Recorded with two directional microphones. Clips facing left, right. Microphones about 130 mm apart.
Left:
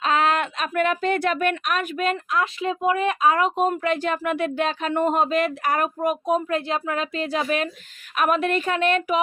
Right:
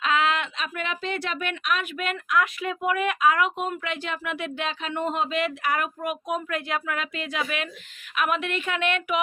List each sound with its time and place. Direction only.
0.0 s a woman's voice: 40° left (ahead or behind)